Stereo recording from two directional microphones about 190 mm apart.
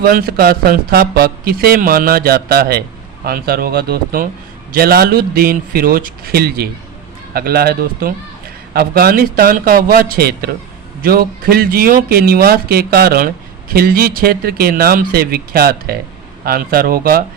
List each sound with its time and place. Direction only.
0.0 s speech: 50° right (ahead or behind)